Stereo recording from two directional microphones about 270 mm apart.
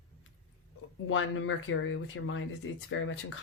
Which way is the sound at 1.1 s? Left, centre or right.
Left.